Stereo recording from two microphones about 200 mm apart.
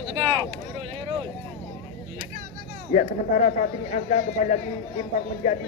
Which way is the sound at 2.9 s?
40° left (ahead or behind).